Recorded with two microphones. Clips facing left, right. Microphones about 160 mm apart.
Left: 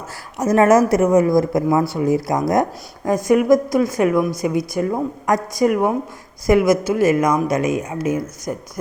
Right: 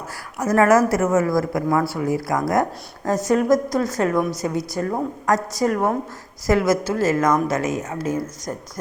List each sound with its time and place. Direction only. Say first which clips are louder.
0.3 s a woman's voice: left 3 dB; 20° left (ahead or behind)